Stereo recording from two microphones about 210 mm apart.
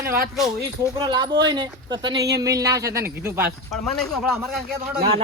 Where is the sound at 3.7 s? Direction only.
Centre (ahead or behind).